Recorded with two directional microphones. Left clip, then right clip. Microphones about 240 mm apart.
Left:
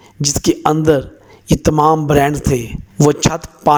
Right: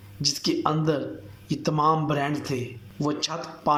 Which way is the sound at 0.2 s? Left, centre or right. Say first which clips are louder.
Left 9 dB; left.